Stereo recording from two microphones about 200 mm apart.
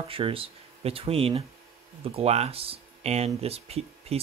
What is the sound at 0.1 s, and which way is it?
Speech, 30° right (ahead or behind).